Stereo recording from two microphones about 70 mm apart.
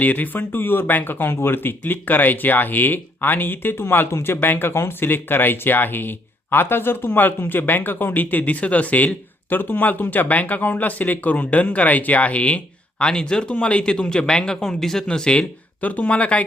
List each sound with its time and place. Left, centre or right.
0.0 s speech: left